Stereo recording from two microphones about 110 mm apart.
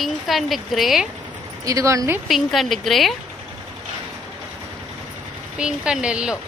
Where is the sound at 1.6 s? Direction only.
30° right (ahead or behind).